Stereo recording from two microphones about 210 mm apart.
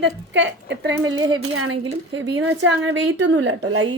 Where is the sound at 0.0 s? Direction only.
60° right (ahead or behind).